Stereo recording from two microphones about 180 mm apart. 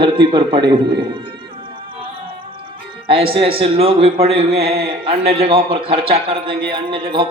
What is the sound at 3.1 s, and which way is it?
A man's voice, 30° right (ahead or behind).